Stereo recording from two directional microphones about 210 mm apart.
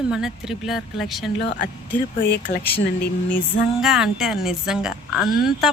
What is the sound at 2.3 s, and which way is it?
Speech, 40° left (ahead or behind).